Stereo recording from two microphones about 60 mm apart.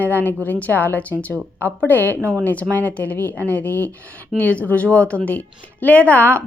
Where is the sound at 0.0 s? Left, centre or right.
Left.